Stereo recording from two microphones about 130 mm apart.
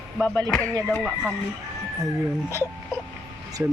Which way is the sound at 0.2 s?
10° left (ahead or behind).